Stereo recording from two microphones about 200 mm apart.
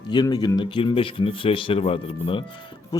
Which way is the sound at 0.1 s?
20° left (ahead or behind).